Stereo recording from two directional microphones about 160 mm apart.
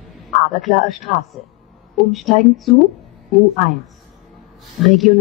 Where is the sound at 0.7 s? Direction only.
Centre (ahead or behind).